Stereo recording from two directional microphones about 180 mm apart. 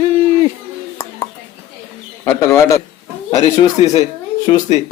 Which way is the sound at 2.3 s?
15° left (ahead or behind).